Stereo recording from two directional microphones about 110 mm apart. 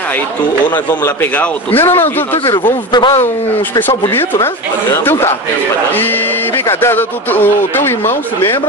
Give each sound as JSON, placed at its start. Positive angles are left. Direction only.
{"t": 1.0, "sound": "speech", "side_deg": 15}
{"t": 2.6, "sound": "a man's voice", "side_deg": 45}
{"t": 3.8, "sound": "speech", "side_deg": 20}